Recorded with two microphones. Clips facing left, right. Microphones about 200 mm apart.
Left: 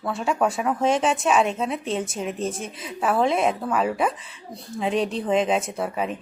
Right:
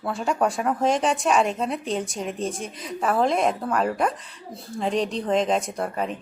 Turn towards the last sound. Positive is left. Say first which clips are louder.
# left 1 dB
turn(degrees=5)  # may be behind; listen again after turning